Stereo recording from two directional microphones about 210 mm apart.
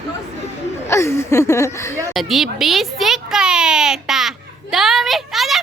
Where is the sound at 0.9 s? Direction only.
10° left (ahead or behind).